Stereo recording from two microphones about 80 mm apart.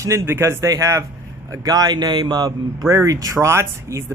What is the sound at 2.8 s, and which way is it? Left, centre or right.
A man's voice, right.